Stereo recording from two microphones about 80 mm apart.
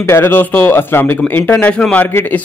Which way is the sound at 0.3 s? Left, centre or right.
Left.